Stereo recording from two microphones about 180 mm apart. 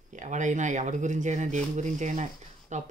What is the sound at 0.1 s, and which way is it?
Speech, 45° right (ahead or behind).